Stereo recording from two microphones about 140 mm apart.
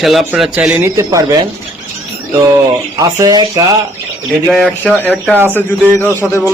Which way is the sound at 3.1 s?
25° right (ahead or behind).